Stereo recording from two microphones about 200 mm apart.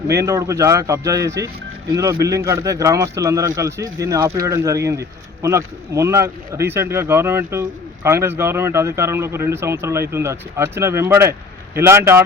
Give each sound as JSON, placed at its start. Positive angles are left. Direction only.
{"t": 0.1, "sound": "speech", "side_deg": -15}